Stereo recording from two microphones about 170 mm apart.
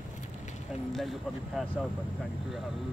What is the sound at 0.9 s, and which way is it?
Speech, centre (ahead or behind).